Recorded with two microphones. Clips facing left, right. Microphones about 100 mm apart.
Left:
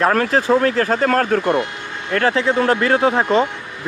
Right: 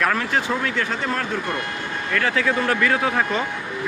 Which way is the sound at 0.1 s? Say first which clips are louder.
Left 7 dB; 40° left (ahead or behind).